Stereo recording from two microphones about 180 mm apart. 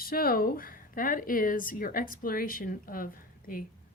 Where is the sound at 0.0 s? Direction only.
55° left (ahead or behind).